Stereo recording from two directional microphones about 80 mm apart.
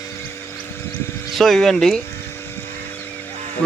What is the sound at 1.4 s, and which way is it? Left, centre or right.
Speech, centre.